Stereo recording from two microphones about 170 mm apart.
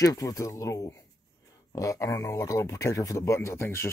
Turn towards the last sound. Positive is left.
turn(degrees=15)  # may be behind; listen again after turning